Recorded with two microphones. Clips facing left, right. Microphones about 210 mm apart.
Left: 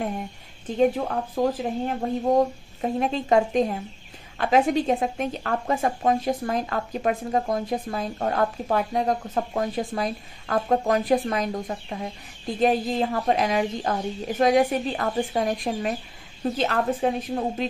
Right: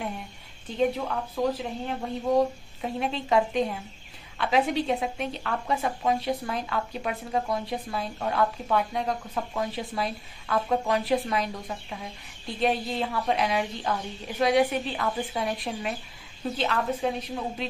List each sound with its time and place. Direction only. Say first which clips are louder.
0.7 s a woman's voice: left 4 dB; 45° left (ahead or behind)